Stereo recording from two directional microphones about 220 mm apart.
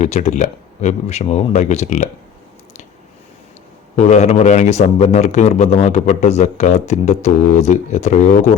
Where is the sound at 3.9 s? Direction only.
30° left (ahead or behind).